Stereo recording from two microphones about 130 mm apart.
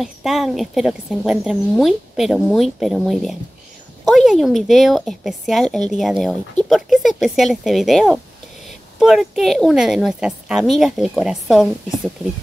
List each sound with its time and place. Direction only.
0.0 s speech: centre (ahead or behind)